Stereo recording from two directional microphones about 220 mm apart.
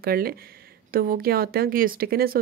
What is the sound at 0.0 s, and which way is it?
Speech, 45° right (ahead or behind).